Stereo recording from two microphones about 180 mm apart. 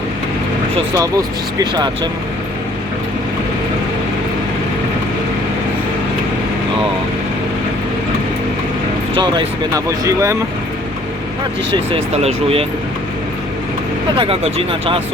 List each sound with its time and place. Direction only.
0.9 s speech: 20° right (ahead or behind)
9.1 s speech: 30° right (ahead or behind)
9.7 s speech: 15° right (ahead or behind)
11.9 s speech: 35° right (ahead or behind)
14.2 s speech: 30° right (ahead or behind)